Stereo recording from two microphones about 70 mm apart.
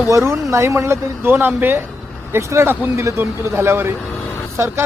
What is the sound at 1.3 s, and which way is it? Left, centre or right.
Speech, right.